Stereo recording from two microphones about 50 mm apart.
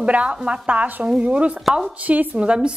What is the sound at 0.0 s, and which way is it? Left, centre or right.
A woman's voice, right.